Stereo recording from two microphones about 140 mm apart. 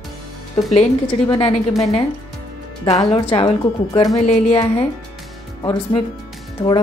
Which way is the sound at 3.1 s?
45° left (ahead or behind).